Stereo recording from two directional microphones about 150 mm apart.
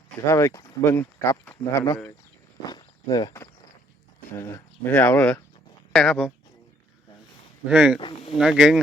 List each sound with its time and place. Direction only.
0.3 s speech: 20° left (ahead or behind); by 6.3 s centre (ahead or behind)
7.7 s speech: 10° right (ahead or behind)
7.9 s speech: 35° left (ahead or behind)
8.4 s speech: 5° right (ahead or behind)